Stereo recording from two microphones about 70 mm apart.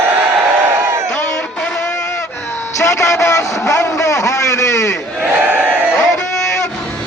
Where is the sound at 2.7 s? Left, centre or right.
Left.